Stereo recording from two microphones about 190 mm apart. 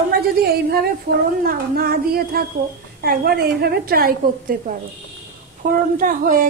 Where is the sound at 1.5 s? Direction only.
50° right (ahead or behind).